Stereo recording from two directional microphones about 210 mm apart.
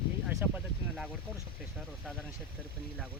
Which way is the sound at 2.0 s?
5° left (ahead or behind).